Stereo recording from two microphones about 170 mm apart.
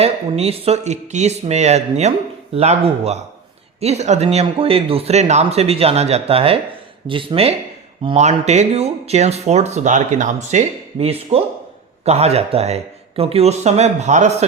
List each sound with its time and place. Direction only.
0.0 s speech: 35° right (ahead or behind)
11.0 s speech: 35° right (ahead or behind)